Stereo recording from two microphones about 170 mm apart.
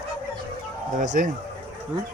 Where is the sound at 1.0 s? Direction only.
50° right (ahead or behind).